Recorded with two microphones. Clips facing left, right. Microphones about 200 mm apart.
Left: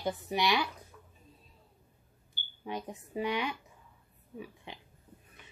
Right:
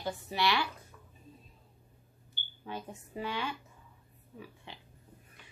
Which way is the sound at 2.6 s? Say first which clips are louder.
Left 3 dB; 15° left (ahead or behind).